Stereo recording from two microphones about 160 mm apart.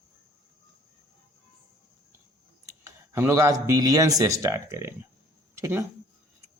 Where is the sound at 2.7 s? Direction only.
15° right (ahead or behind).